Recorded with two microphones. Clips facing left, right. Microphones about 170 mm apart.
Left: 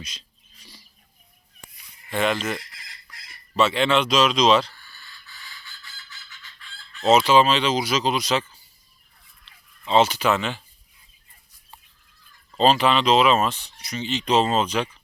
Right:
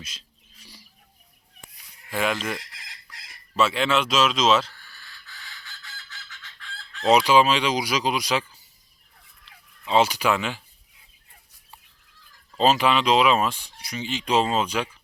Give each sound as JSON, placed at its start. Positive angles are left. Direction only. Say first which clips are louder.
{"t": 0.0, "sound": "a sound", "louder": "left 3 dB", "side_deg": -5}
{"t": 2.0, "sound": "speech", "louder": "left 2 dB", "side_deg": -5}
{"t": 5.6, "sound": "fowl", "louder": "right 2 dB", "side_deg": -75}
{"t": 7.1, "sound": "speech", "louder": "left 1 dB", "side_deg": -10}
{"t": 9.8, "sound": "speech", "louder": "left 2 dB", "side_deg": -10}
{"t": 12.5, "sound": "speech", "louder": "left 1 dB", "side_deg": -10}